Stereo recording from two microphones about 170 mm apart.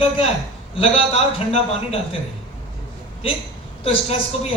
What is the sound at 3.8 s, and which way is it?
Speech, 35° left (ahead or behind).